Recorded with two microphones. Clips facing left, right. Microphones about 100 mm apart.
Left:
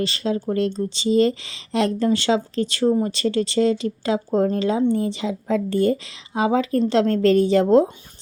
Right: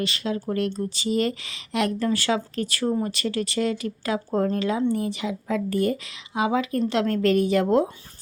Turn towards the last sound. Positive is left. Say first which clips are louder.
# left 5 dB
turn(degrees=30)  # may be behind; listen again after turning